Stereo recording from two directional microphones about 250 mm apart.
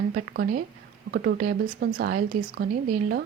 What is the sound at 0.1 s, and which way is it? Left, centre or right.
A woman's voice, right.